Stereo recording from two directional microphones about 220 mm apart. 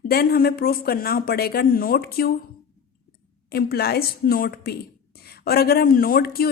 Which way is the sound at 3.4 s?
45° left (ahead or behind).